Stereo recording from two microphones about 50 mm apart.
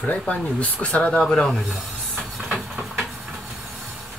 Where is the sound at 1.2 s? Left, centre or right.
Centre.